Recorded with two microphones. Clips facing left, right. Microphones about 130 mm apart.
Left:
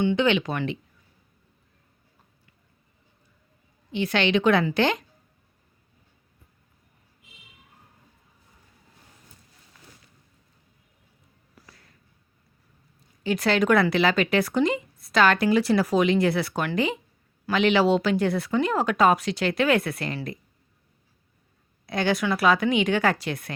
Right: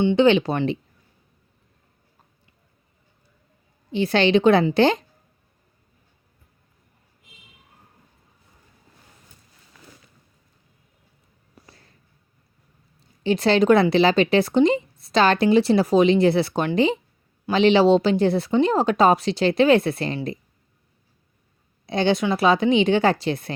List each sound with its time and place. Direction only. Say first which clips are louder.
0.0 s a woman's voice: right 5 dB; 25° right (ahead or behind)
3.9 s a woman's voice: right 5 dB; 35° right (ahead or behind)
11.5 s a sound: right 2 dB; 30° right (ahead or behind)
13.2 s speech: right 5 dB; 30° right (ahead or behind)
21.8 s speech: right 4 dB; 25° right (ahead or behind)